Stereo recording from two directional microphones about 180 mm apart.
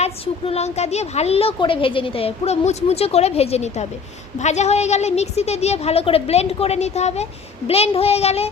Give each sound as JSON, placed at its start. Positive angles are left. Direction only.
{"t": 0.0, "sound": "a woman's voice", "side_deg": 35}